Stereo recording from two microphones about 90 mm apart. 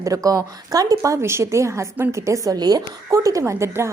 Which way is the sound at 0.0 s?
40° right (ahead or behind).